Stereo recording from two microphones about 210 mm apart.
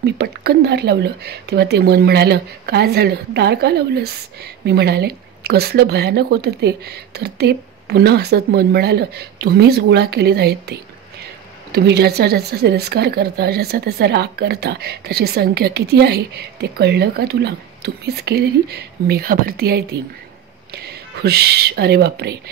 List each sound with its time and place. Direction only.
0.0 s a woman's voice: 50° right (ahead or behind)